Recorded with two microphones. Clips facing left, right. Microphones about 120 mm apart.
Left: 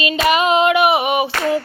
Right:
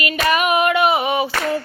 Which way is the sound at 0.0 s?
25° left (ahead or behind).